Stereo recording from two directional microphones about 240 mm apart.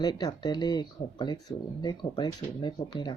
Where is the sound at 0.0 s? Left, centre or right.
Centre.